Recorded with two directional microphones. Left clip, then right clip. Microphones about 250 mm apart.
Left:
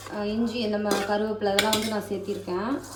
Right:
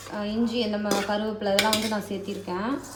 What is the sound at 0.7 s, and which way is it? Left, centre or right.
A child's voice, centre.